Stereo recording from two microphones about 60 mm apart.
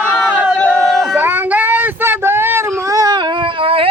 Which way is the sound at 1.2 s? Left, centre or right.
Right.